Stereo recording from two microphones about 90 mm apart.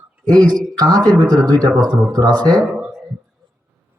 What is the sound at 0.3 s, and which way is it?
Speech, 50° right (ahead or behind).